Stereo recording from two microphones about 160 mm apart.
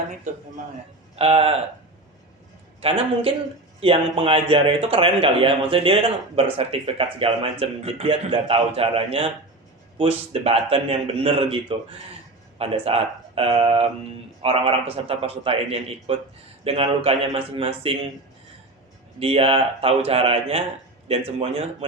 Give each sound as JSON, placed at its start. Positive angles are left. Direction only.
{"t": 1.1, "sound": "speech", "side_deg": -40}
{"t": 2.8, "sound": "a man's voice", "side_deg": -35}
{"t": 10.4, "sound": "a man's voice", "side_deg": -40}
{"t": 19.2, "sound": "a man's voice", "side_deg": -35}